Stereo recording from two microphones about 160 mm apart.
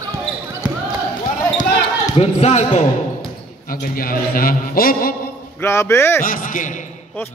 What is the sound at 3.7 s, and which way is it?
A man's voice, 65° left (ahead or behind).